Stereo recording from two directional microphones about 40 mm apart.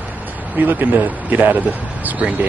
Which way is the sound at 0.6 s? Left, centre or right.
Right.